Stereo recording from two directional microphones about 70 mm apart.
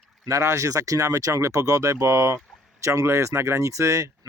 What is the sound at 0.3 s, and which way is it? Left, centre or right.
Speech, right.